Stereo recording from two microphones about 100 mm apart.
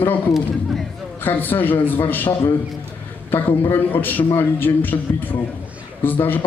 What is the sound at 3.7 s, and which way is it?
A man's voice, 20° left (ahead or behind).